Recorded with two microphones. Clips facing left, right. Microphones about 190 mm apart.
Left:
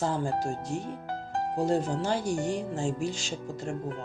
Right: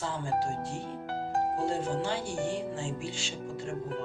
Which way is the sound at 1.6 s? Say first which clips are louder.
Left 3 dB; 40° left (ahead or behind).